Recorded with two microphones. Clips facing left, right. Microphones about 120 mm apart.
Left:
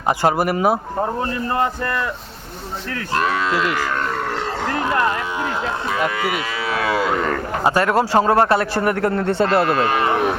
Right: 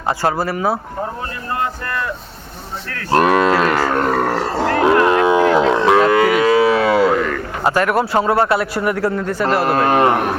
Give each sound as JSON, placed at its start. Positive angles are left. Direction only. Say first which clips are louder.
{"t": 0.2, "sound": "speech", "louder": "left 1 dB", "side_deg": 20}
{"t": 3.1, "sound": "speech", "louder": "right 7 dB", "side_deg": -55}
{"t": 4.8, "sound": "speech", "louder": "right 8 dB", "side_deg": -90}
{"t": 6.3, "sound": "moo", "louder": "right 11 dB", "side_deg": -45}
{"t": 7.6, "sound": "a man's voice", "louder": "right 1 dB", "side_deg": 20}
{"t": 9.3, "sound": "speech", "louder": "left 2 dB", "side_deg": 25}
{"t": 9.7, "sound": "speech", "louder": "right 5 dB", "side_deg": -45}